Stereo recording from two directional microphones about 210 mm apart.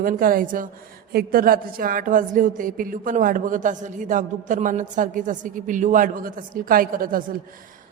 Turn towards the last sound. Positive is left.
turn(degrees=-40)  # may be behind; listen again after turning